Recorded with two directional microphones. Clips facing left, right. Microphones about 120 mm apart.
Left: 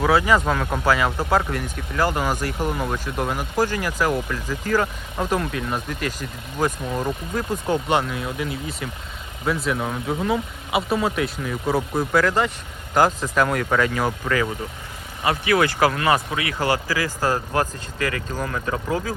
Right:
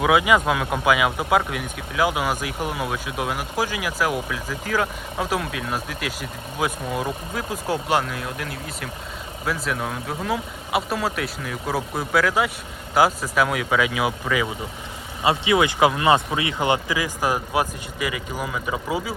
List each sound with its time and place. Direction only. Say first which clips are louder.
0.0 s speech: even; 10° right (ahead or behind)
15.2 s speech: even; 20° right (ahead or behind)